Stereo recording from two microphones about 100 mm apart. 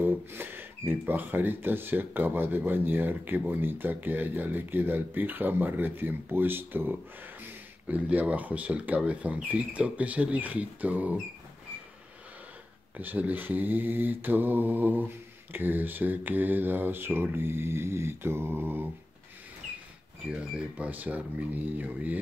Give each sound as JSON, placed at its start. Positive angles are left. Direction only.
{"t": 0.0, "sound": "speech", "side_deg": -20}
{"t": 12.9, "sound": "speech", "side_deg": -15}
{"t": 20.2, "sound": "speech", "side_deg": -10}